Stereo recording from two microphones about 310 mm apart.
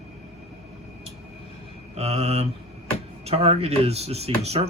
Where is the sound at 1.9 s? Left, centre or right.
Centre.